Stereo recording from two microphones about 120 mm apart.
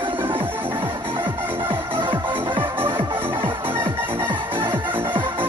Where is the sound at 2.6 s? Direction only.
15° right (ahead or behind).